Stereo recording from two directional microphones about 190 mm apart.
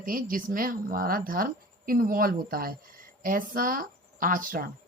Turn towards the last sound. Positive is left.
turn(degrees=-45)  # may be behind; listen again after turning